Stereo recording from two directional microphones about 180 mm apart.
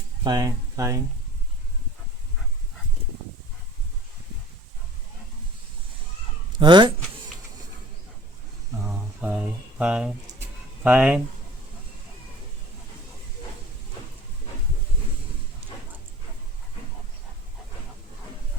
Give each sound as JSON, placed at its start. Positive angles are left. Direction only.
{"t": 0.3, "sound": "speech", "side_deg": -20}
{"t": 6.6, "sound": "speech", "side_deg": -25}
{"t": 8.8, "sound": "a sound", "side_deg": -15}